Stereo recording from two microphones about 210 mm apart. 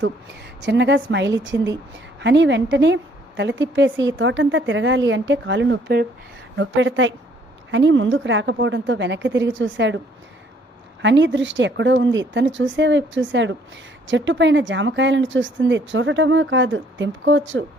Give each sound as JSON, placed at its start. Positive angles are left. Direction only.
{"t": 0.6, "sound": "a woman's voice", "side_deg": -55}
{"t": 11.0, "sound": "speech", "side_deg": -60}